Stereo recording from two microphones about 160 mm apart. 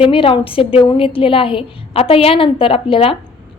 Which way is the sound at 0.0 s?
35° left (ahead or behind).